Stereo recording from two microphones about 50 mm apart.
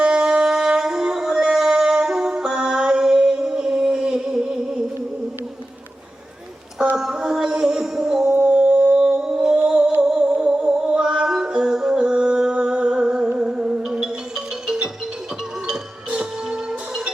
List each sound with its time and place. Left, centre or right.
0.0 s singing: centre
6.9 s music: centre
16.0 s music: centre